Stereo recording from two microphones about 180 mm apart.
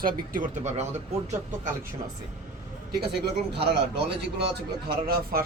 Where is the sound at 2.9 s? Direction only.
60° right (ahead or behind).